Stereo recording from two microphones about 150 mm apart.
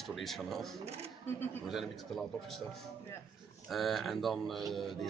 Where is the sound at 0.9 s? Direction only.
45° right (ahead or behind).